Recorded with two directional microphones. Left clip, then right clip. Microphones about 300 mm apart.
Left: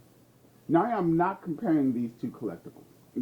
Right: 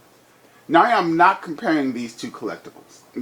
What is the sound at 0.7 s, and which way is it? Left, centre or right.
Speech, centre.